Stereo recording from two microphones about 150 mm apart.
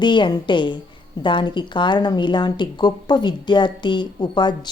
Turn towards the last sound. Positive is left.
turn(degrees=30)  # may be behind; listen again after turning